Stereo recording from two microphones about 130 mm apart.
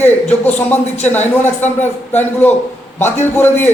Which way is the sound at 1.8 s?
15° left (ahead or behind).